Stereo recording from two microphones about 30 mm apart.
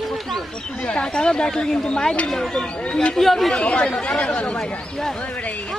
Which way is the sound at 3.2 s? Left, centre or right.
Centre.